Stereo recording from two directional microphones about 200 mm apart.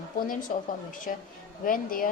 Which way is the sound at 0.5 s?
40° left (ahead or behind).